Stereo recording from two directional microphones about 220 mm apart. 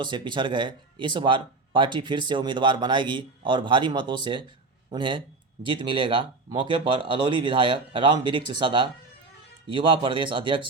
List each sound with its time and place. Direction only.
0.0 s speech: 20° right (ahead or behind)